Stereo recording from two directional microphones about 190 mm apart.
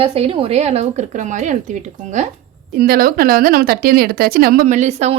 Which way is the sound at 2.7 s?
50° right (ahead or behind).